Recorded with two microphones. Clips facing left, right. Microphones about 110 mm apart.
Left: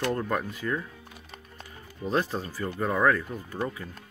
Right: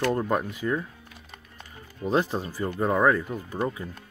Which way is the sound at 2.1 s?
20° right (ahead or behind).